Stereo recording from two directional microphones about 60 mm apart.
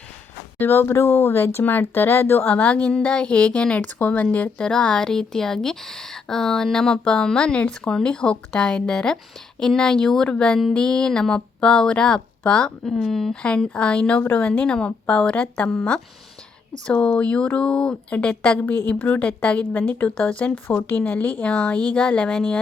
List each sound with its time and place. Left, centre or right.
0.6 s speech: left
2.5 s speech: left
4.6 s speech: centre
12.8 s speech: centre
13.3 s speech: centre